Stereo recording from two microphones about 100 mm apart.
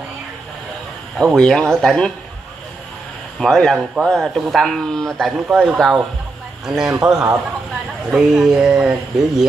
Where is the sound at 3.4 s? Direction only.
5° left (ahead or behind).